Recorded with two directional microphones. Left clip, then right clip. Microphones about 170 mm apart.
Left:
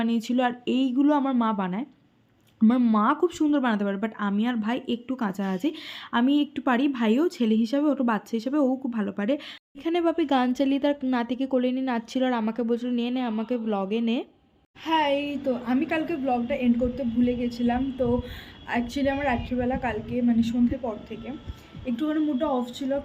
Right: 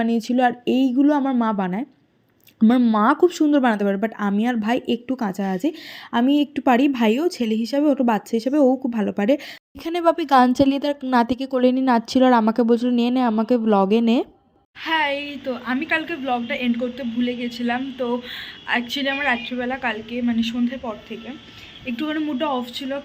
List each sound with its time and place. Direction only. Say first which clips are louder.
0.0 s speech: right 6 dB; 15° right (ahead or behind)
3.0 s speech: right 6 dB; 25° right (ahead or behind)
14.8 s a man's voice: right 2 dB; 10° left (ahead or behind)
21.8 s a man's voice: right 1 dB; 15° left (ahead or behind)